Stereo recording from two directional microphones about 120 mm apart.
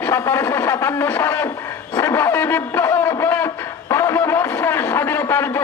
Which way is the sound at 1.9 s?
20° left (ahead or behind).